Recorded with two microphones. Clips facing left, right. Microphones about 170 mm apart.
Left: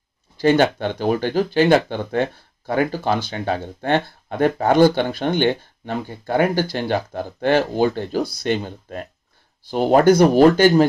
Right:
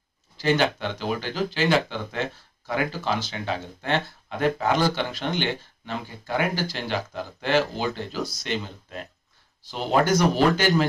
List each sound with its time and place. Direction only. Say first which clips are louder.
0.4 s speech: left 7 dB; 50° left (ahead or behind)